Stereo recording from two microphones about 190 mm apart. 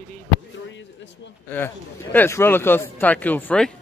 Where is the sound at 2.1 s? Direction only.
10° left (ahead or behind).